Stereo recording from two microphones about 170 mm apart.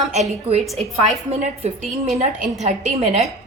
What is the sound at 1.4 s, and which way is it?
Speech, 35° right (ahead or behind).